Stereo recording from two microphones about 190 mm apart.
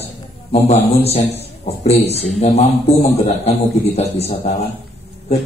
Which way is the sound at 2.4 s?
35° left (ahead or behind).